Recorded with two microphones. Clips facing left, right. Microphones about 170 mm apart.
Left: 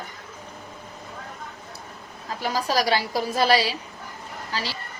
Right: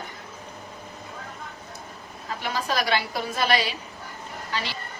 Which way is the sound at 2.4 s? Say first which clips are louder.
Left 4 dB; 35° left (ahead or behind).